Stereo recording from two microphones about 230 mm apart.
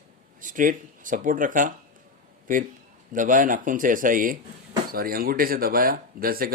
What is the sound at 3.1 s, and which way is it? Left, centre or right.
Speech, right.